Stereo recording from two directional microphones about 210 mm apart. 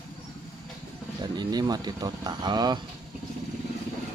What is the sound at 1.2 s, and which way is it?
Speech, 20° right (ahead or behind).